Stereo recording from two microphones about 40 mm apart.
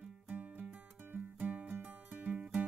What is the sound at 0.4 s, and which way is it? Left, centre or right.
Music, right.